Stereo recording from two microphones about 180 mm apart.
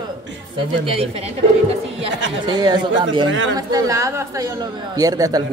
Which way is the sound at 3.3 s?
90° right.